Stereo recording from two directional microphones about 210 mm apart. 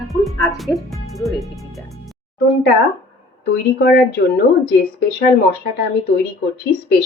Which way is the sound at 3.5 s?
50° left (ahead or behind).